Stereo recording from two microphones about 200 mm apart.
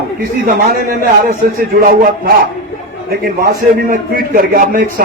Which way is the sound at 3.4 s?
45° right (ahead or behind).